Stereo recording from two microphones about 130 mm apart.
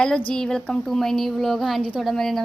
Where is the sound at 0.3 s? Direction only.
5° left (ahead or behind).